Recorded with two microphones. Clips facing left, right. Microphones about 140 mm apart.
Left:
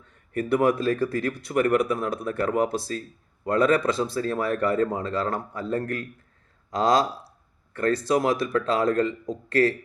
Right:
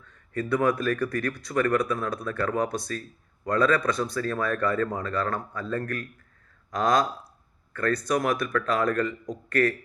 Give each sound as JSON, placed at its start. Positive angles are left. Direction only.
{"t": 0.0, "sound": "speech", "side_deg": 25}